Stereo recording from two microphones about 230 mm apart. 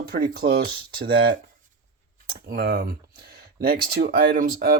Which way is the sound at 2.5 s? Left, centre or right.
Right.